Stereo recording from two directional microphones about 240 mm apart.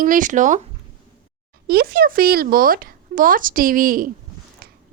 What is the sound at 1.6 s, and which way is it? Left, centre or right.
A woman's voice, right.